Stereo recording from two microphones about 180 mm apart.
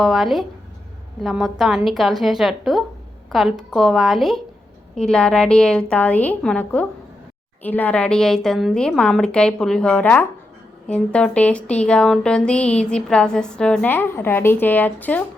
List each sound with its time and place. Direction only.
0.0 s a woman's voice: centre (ahead or behind)